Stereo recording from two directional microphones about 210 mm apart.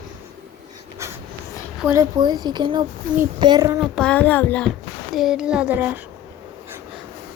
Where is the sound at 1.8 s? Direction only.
15° right (ahead or behind).